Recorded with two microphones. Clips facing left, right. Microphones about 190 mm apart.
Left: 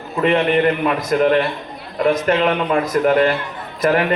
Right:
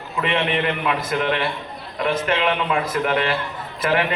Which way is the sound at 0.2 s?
35° left (ahead or behind).